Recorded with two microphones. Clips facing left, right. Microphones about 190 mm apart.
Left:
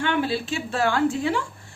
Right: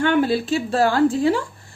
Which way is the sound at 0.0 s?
45° right (ahead or behind).